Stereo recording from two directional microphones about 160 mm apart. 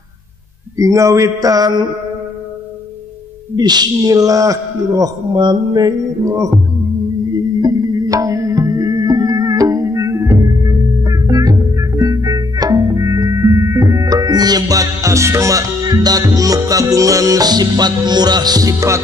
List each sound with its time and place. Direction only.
0.7 s speech: 20° right (ahead or behind)
3.5 s speech: 25° right (ahead or behind)
7.6 s music: 20° right (ahead or behind)